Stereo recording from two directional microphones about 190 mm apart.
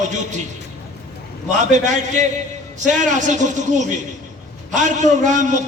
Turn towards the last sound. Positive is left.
turn(degrees=-40)  # may be behind; listen again after turning